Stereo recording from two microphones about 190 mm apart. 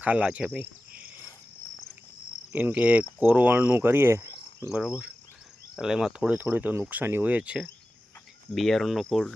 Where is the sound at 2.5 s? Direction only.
10° right (ahead or behind).